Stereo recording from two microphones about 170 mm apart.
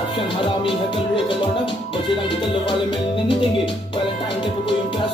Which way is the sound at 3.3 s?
30° left (ahead or behind).